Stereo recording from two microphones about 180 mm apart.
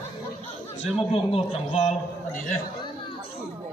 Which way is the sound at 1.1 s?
35° left (ahead or behind).